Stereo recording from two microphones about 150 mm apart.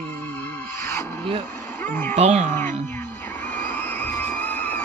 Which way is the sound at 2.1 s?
50° right (ahead or behind).